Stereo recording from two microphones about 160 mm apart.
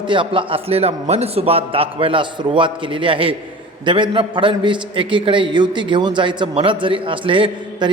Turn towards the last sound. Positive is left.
turn(degrees=-30)  # may be behind; listen again after turning